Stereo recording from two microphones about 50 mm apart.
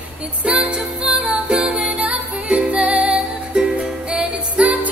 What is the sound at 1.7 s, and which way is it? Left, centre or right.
Music, right.